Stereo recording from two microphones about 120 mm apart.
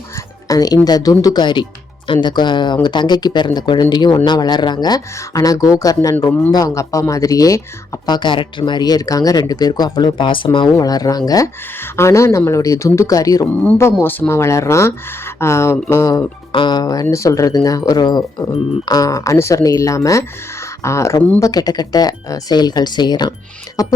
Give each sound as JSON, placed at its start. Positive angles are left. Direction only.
{"t": 0.4, "sound": "speech", "side_deg": 30}
{"t": 8.0, "sound": "speech", "side_deg": 40}
{"t": 10.8, "sound": "speech", "side_deg": 30}
{"t": 13.5, "sound": "speech", "side_deg": 10}
{"t": 16.5, "sound": "speech", "side_deg": 40}